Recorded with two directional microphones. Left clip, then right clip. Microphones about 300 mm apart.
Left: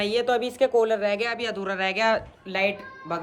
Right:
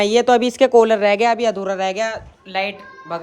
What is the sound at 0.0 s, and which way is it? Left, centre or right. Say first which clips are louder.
A woman's voice: right 9 dB; right.